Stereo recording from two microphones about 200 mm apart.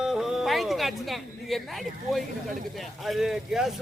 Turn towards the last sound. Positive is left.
turn(degrees=0)  # may be behind; listen again after turning